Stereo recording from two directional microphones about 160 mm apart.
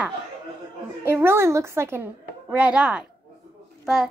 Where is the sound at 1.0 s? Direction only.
15° right (ahead or behind).